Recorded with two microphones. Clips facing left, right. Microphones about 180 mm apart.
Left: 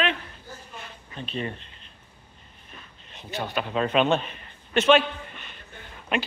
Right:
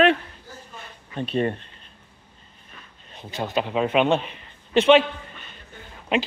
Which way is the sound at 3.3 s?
25° right (ahead or behind).